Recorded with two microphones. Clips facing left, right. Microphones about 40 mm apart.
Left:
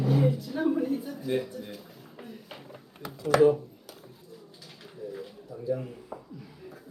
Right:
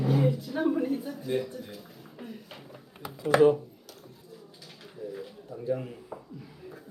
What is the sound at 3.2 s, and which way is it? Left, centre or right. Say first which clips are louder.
Speech: even; right.